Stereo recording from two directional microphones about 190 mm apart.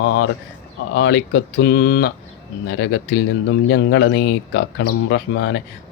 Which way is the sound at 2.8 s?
70° left (ahead or behind).